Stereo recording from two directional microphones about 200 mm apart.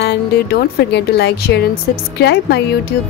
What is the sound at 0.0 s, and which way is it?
A woman's voice, 55° left (ahead or behind).